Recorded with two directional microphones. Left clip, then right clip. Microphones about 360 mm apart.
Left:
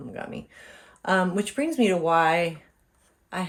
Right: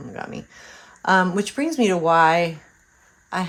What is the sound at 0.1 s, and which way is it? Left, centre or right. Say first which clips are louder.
Speech: right 4 dB; centre.